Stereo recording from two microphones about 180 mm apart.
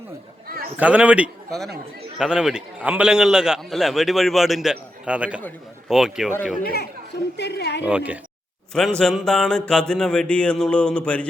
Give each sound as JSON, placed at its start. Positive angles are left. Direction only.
{"t": 0.4, "sound": "a sound", "side_deg": -55}
{"t": 0.8, "sound": "a man's voice", "side_deg": -10}
{"t": 6.6, "sound": "speech", "side_deg": 60}
{"t": 7.3, "sound": "a woman's voice", "side_deg": 70}
{"t": 7.9, "sound": "a man's voice", "side_deg": -10}
{"t": 9.0, "sound": "a man's voice", "side_deg": 5}